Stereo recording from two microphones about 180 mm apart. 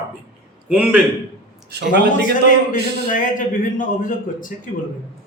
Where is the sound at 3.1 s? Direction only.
50° left (ahead or behind).